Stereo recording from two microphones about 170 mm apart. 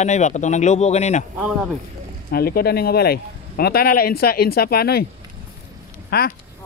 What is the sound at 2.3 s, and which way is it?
Speech, 65° left (ahead or behind).